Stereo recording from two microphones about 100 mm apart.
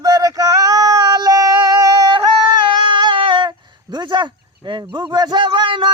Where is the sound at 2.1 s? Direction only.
50° right (ahead or behind).